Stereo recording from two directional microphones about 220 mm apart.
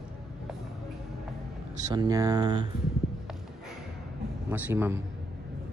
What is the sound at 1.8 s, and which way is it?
Speech, 15° right (ahead or behind).